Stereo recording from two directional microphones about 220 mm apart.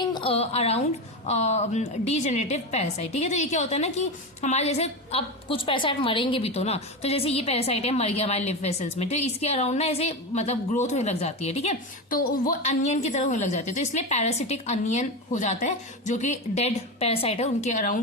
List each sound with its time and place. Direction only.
0.0 s a woman's voice: 20° left (ahead or behind)